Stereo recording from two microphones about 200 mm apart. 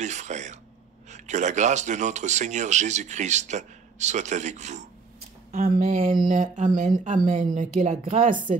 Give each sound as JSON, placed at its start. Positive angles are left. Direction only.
{"t": 0.0, "sound": "speech", "side_deg": -35}